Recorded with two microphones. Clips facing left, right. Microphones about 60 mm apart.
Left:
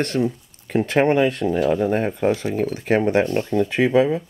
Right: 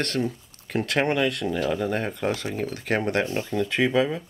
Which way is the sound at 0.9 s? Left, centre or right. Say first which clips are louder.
Left 6 dB; centre.